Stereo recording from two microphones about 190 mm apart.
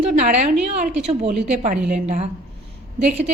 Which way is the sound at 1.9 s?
40° right (ahead or behind).